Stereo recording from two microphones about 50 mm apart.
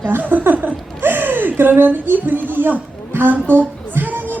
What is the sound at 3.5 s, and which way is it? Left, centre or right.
Speech, left.